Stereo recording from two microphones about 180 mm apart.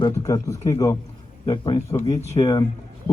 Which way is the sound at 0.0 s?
20° left (ahead or behind).